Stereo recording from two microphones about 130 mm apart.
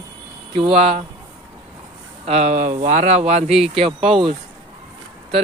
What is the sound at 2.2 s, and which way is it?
Speech, 60° right (ahead or behind).